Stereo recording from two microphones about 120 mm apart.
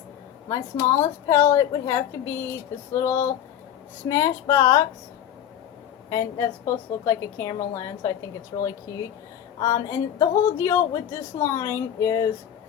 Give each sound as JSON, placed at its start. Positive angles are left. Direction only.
{"t": 0.4, "sound": "a woman's voice", "side_deg": 25}
{"t": 6.1, "sound": "a woman's voice", "side_deg": 25}
{"t": 8.5, "sound": "speech", "side_deg": 40}
{"t": 9.6, "sound": "a woman's voice", "side_deg": 30}